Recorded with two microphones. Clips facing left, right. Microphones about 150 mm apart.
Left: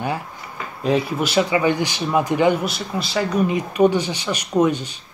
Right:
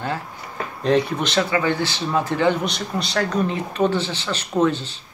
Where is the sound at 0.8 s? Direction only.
5° left (ahead or behind).